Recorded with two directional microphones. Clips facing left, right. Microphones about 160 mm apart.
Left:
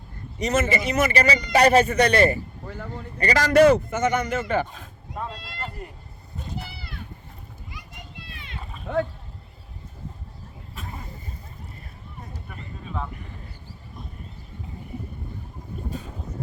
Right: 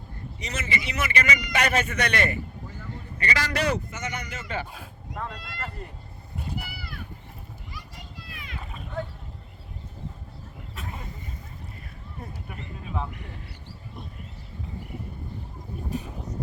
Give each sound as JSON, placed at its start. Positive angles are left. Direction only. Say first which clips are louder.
{"t": 0.3, "sound": "a man's voice", "louder": "left 10 dB", "side_deg": 45}
{"t": 5.1, "sound": "speech", "louder": "left 2 dB", "side_deg": 25}
{"t": 6.7, "sound": "a sound", "louder": "even", "side_deg": 25}
{"t": 8.3, "sound": "boat", "louder": "even", "side_deg": 30}
{"t": 8.9, "sound": "speech", "louder": "left 9 dB", "side_deg": 90}
{"t": 12.5, "sound": "speech", "louder": "even", "side_deg": -15}
{"t": 15.9, "sound": "a sound", "louder": "right 4 dB", "side_deg": -15}